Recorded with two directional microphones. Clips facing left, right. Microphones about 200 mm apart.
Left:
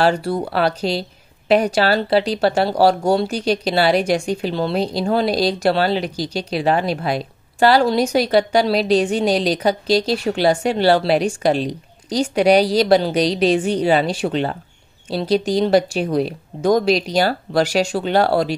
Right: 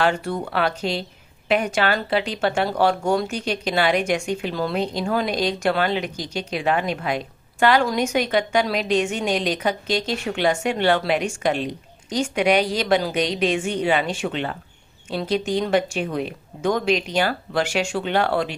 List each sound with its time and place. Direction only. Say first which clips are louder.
0.0 s speech: left 4 dB; 35° left (ahead or behind)